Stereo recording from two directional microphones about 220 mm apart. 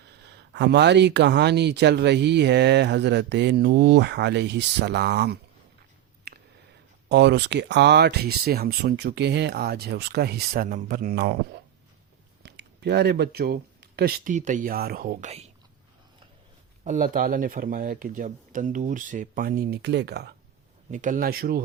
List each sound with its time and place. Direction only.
0.5 s speech: 50° right (ahead or behind)
6.3 s a sound: 45° right (ahead or behind)
7.1 s speech: 50° right (ahead or behind); by 15.4 s 30° right (ahead or behind)
16.8 s speech: 35° right (ahead or behind)
20.9 s speech: 35° right (ahead or behind)